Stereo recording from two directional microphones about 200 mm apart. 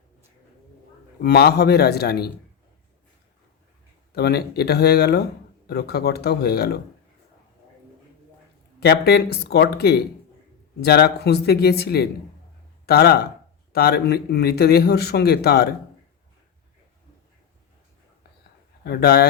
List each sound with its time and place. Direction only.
1.2 s speech: 55° left (ahead or behind)
4.1 s speech: 55° left (ahead or behind)
8.8 s speech: 55° left (ahead or behind)
18.9 s speech: 50° left (ahead or behind)